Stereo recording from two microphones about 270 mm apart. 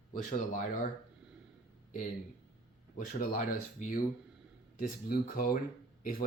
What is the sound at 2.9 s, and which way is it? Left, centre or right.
Speech, left.